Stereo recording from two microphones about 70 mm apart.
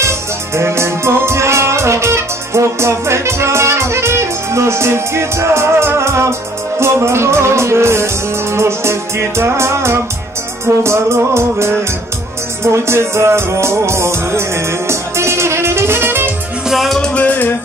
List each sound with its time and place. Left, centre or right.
0.6 s music: right
16.6 s music: centre
17.0 s music: centre